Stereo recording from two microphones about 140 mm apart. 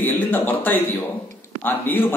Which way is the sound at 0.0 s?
15° left (ahead or behind).